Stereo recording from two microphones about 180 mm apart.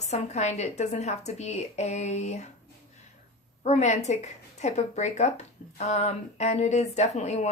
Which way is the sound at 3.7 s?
40° left (ahead or behind).